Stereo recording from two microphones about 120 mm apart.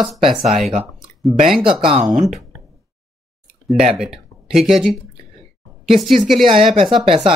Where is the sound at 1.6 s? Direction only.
45° right (ahead or behind).